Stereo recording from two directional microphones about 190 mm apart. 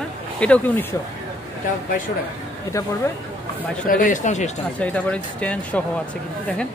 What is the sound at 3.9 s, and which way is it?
Speech, 45° left (ahead or behind).